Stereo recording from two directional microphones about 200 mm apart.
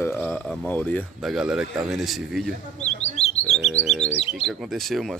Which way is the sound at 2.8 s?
35° left (ahead or behind).